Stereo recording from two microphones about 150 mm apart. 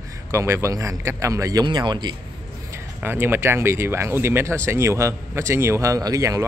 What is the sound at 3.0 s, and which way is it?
Speech, 15° right (ahead or behind).